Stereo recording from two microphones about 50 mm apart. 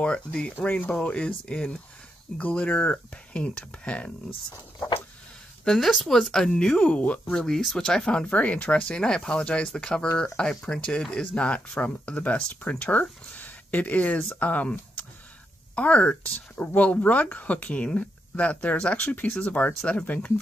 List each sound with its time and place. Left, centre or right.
0.0 s speech: left
0.6 s speech: left
1.0 s speech: left
5.7 s speech: centre
6.8 s speech: left
7.4 s speech: centre; by 14.7 s left
15.7 s speech: left